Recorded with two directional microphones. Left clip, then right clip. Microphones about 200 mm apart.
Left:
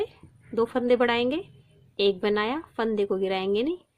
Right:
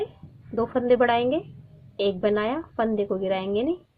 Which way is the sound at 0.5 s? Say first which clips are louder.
Right 1 dB; 50° left (ahead or behind).